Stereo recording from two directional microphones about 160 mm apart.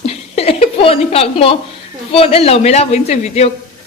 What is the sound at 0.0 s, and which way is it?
A woman's voice, 40° left (ahead or behind).